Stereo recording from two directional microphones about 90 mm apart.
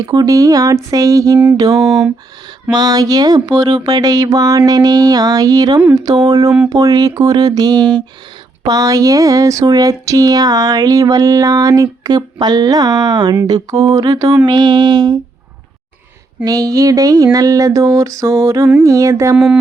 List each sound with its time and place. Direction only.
0.0 s music: 45° right (ahead or behind)
1.9 s speech: 5° right (ahead or behind)
2.7 s speech: 45° right (ahead or behind)
13.5 s music: 40° right (ahead or behind)
14.1 s speech: 40° right (ahead or behind)
16.4 s music: 40° right (ahead or behind)